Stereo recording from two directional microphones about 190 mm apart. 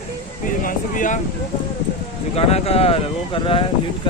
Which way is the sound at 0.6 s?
45° left (ahead or behind).